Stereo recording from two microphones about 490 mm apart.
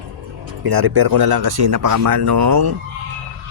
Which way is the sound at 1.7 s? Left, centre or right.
Right.